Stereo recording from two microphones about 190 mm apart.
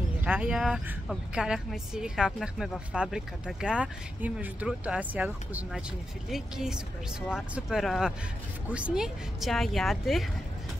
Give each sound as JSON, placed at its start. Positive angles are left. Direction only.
{"t": 0.2, "sound": "a woman's voice", "side_deg": -10}